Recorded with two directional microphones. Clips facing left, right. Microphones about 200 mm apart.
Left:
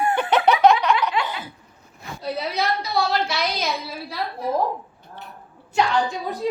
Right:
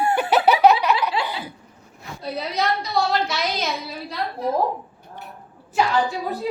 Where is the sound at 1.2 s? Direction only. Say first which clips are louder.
Left 1 dB; 30° right (ahead or behind).